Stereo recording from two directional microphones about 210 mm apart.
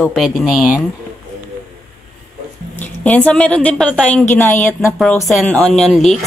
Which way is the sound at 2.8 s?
5° left (ahead or behind).